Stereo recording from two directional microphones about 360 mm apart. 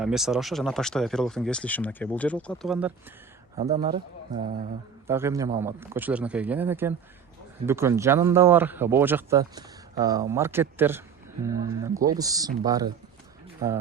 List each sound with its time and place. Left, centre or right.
0.0 s speech: centre
3.5 s speech: centre
5.0 s speech: centre